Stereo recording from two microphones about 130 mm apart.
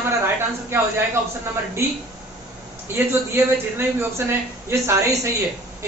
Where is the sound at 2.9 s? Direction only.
15° right (ahead or behind).